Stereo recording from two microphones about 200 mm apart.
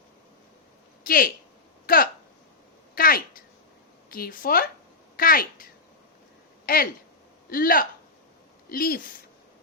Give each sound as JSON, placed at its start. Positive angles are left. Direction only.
{"t": 1.0, "sound": "a woman's voice", "side_deg": 45}
{"t": 7.5, "sound": "a woman's voice", "side_deg": 45}